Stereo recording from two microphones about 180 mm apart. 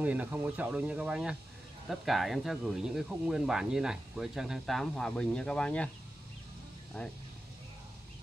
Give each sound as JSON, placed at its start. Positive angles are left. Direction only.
{"t": 0.0, "sound": "speech", "side_deg": -10}
{"t": 7.0, "sound": "speech", "side_deg": 5}